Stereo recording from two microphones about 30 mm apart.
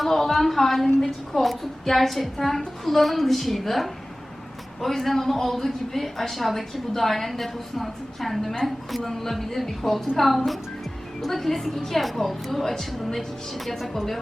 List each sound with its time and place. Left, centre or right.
0.0 s a woman's voice: centre
11.7 s speech: centre
12.2 s a woman's voice: centre
12.6 s a woman's voice: centre
13.7 s speech: centre